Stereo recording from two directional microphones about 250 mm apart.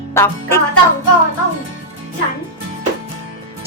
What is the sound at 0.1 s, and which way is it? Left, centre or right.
Music, centre.